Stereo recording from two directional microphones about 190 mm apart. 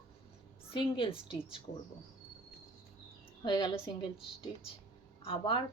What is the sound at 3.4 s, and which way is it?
Speech, 25° left (ahead or behind).